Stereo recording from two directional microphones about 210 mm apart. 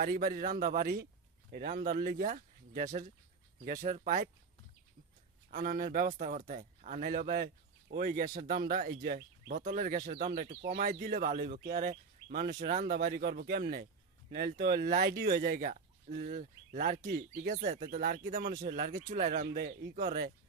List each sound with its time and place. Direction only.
0.0 s speech: 45° right (ahead or behind)
5.5 s speech: 40° right (ahead or behind)
19.2 s speech: 35° right (ahead or behind)
19.5 s speech: 50° right (ahead or behind)
20.1 s speech: 40° right (ahead or behind)